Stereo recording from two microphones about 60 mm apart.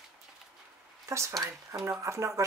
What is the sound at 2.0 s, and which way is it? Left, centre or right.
Speech, right.